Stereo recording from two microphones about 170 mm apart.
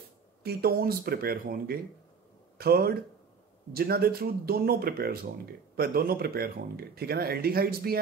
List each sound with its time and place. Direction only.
0.4 s speech: 70° right (ahead or behind)